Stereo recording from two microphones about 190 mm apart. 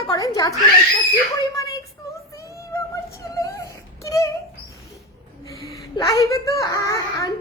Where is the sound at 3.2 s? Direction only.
15° left (ahead or behind).